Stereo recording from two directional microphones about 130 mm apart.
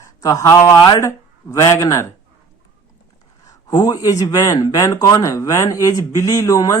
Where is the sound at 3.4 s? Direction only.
30° left (ahead or behind).